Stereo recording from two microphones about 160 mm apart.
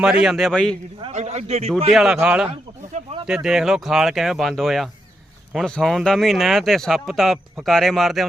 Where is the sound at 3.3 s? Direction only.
5° right (ahead or behind).